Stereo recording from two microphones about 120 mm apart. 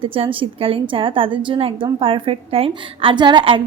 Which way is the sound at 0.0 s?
50° right (ahead or behind).